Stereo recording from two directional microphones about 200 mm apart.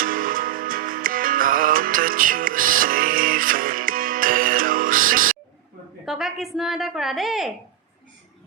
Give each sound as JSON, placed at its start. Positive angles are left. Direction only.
{"t": 0.0, "sound": "music", "side_deg": -45}
{"t": 6.1, "sound": "a woman's voice", "side_deg": 0}